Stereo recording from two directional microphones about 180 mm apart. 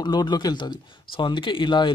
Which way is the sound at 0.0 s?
25° left (ahead or behind).